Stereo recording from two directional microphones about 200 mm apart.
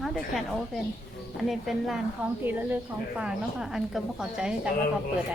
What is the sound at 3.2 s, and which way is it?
A woman's voice, 5° right (ahead or behind).